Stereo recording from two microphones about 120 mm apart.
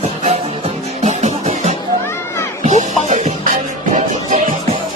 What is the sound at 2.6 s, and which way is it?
Music, 90° right.